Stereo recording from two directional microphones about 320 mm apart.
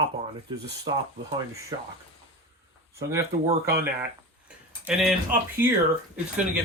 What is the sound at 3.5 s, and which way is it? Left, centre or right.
Speech, right.